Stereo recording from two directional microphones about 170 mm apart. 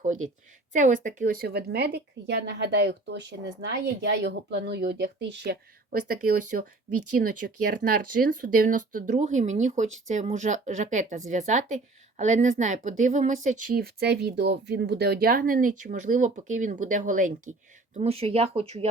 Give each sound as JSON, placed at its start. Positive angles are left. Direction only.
{"t": 0.0, "sound": "a woman's voice", "side_deg": -50}
{"t": 6.0, "sound": "speech", "side_deg": -50}
{"t": 13.7, "sound": "speech", "side_deg": -70}
{"t": 17.9, "sound": "speech", "side_deg": -35}